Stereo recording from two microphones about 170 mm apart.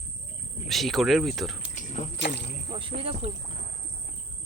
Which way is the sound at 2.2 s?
90° left.